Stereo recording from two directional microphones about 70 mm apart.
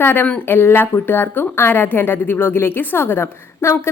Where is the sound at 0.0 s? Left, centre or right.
Left.